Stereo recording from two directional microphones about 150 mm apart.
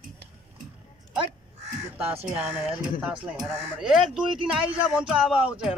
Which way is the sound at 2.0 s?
10° right (ahead or behind).